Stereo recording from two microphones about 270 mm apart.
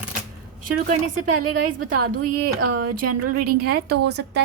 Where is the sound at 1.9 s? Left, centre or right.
Right.